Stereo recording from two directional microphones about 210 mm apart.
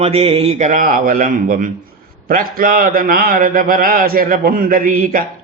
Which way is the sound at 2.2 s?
40° right (ahead or behind).